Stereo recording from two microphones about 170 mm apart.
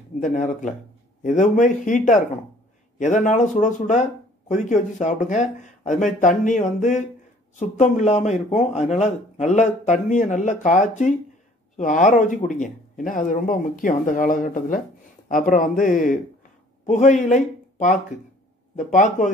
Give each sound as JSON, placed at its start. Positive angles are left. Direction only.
{"t": 0.2, "sound": "a man's voice", "side_deg": 50}